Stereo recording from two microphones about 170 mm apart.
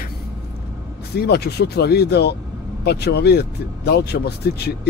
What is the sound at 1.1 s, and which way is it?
Speech, 70° left (ahead or behind).